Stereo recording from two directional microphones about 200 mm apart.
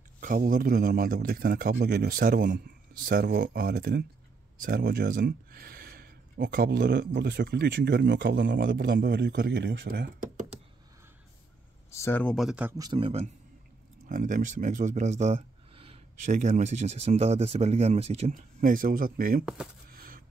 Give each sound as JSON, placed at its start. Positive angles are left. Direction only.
{"t": 0.2, "sound": "a man's voice", "side_deg": -40}
{"t": 11.9, "sound": "speech", "side_deg": 10}
{"t": 12.7, "sound": "speech", "side_deg": -20}
{"t": 14.0, "sound": "speech", "side_deg": -40}
{"t": 19.4, "sound": "speech", "side_deg": -5}
{"t": 19.9, "sound": "a sound", "side_deg": -45}